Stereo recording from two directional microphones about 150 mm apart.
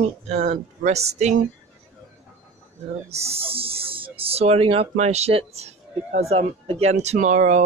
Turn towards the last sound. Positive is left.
turn(degrees=-50)  # may be behind; listen again after turning